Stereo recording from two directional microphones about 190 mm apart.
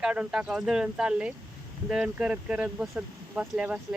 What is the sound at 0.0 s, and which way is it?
Speech, 5° right (ahead or behind).